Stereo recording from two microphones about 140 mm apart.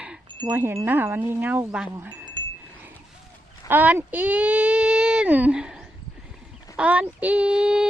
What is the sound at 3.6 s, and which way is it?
Speech, 10° right (ahead or behind).